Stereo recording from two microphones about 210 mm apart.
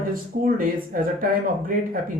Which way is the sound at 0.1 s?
40° right (ahead or behind).